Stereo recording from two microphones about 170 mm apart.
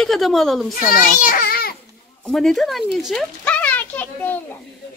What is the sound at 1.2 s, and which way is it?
Baby cry, 55° left (ahead or behind).